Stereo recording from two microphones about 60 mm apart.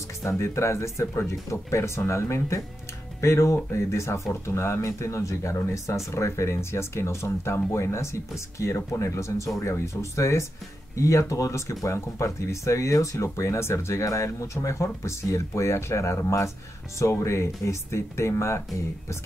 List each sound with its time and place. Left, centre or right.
0.2 s speech: left